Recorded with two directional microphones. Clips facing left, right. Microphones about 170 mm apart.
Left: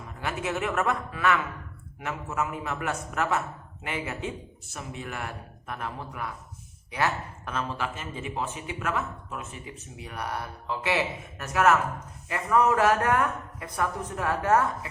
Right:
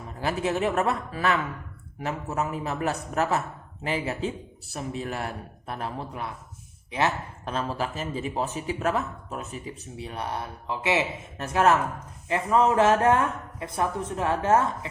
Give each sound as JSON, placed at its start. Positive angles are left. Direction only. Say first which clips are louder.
{"t": 0.2, "sound": "speech", "louder": "right 4 dB", "side_deg": -35}